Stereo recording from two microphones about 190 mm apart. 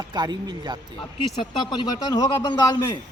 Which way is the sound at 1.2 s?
25° left (ahead or behind).